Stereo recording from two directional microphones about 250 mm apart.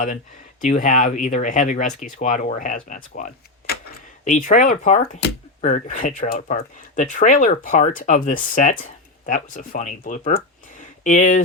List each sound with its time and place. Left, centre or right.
0.6 s speech: left